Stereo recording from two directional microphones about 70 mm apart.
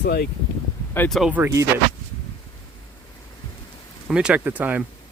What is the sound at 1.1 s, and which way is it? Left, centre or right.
Speech, centre.